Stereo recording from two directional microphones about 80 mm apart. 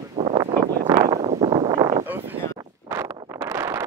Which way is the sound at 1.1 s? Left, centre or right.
Right.